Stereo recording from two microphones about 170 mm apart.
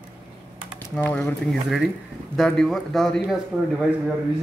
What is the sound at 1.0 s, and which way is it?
A man's voice, 10° left (ahead or behind).